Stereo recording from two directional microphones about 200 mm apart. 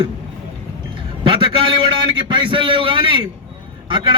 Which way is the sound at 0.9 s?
25° right (ahead or behind).